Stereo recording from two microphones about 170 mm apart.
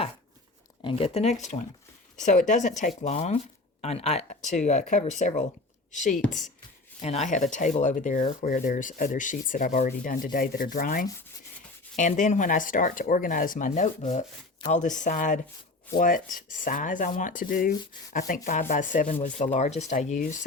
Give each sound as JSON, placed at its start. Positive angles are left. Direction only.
{"t": 0.9, "sound": "speech", "side_deg": 35}